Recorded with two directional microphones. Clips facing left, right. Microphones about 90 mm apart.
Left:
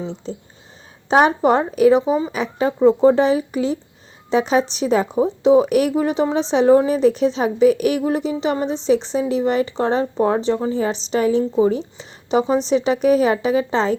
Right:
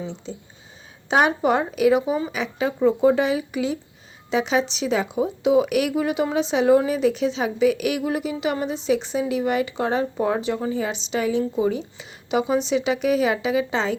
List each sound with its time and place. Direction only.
0.0 s a woman's voice: 35° left (ahead or behind)